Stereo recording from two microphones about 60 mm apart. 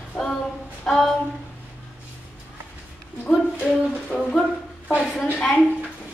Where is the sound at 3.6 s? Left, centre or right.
Centre.